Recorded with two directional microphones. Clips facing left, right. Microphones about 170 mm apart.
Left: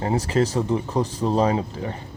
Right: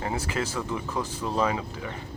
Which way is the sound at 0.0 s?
35° left (ahead or behind).